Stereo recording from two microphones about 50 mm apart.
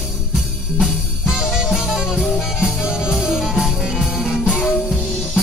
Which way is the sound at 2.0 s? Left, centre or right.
Centre.